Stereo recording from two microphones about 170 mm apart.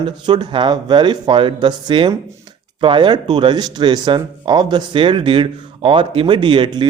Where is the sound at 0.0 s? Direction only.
25° right (ahead or behind).